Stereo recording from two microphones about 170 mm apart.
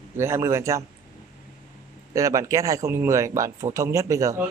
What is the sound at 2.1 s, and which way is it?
Speech, 20° right (ahead or behind).